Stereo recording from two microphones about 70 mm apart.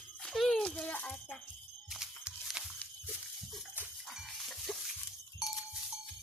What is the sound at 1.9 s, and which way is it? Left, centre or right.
Music, centre.